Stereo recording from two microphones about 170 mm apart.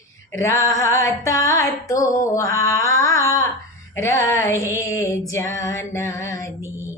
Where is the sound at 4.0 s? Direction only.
15° left (ahead or behind).